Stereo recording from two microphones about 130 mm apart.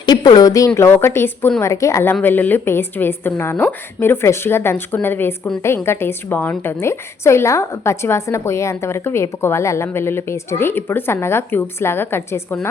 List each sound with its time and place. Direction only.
0.0 s a woman's voice: 35° left (ahead or behind); by 12.5 s 15° left (ahead or behind)